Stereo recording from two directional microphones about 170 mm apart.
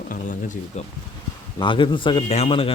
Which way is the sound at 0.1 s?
50° left (ahead or behind).